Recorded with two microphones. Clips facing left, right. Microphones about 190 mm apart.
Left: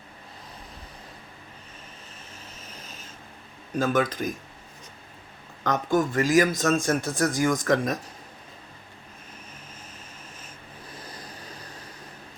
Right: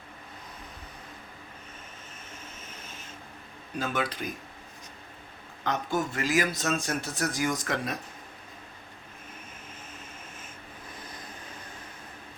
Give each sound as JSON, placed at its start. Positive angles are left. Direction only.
{"t": 3.8, "sound": "a man's voice", "side_deg": 45}
{"t": 5.6, "sound": "a man's voice", "side_deg": 45}